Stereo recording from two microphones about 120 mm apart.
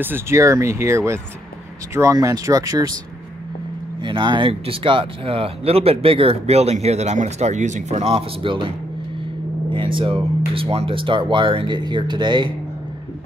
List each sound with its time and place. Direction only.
0.0 s speech: 20° right (ahead or behind)
4.0 s speech: 40° right (ahead or behind); by 8.0 s 90° right
8.0 s speech: 55° right (ahead or behind)